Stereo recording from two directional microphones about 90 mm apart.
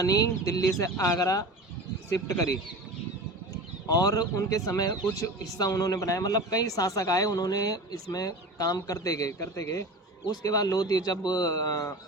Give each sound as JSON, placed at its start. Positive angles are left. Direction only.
{"t": 0.0, "sound": "a man's voice", "side_deg": 40}
{"t": 3.8, "sound": "a man's voice", "side_deg": 45}